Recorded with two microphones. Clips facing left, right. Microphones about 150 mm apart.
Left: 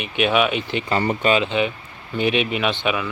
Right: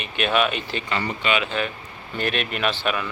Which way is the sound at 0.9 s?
40° left (ahead or behind).